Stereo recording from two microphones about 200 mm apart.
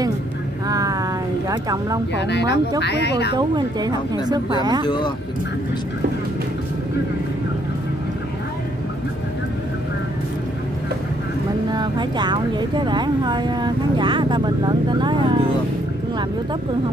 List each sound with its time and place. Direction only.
0.7 s vehicle: 20° right (ahead or behind)
1.5 s speech: 20° right (ahead or behind)
2.1 s speech: 60° left (ahead or behind)
3.3 s speech: 20° right (ahead or behind)
4.8 s speech: 20° left (ahead or behind)
11.7 s speech: 20° right (ahead or behind)